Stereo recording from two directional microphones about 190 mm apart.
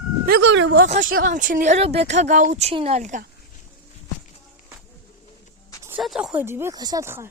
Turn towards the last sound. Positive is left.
turn(degrees=-15)  # may be behind; listen again after turning